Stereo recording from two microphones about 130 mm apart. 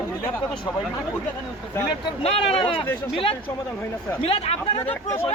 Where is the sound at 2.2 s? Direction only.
50° left (ahead or behind).